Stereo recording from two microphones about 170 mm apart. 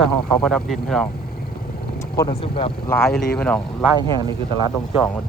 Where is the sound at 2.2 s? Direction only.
30° left (ahead or behind).